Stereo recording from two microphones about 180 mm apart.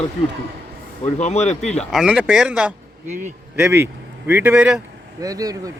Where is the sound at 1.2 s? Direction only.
40° left (ahead or behind).